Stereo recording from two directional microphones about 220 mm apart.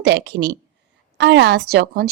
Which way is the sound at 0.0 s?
50° right (ahead or behind).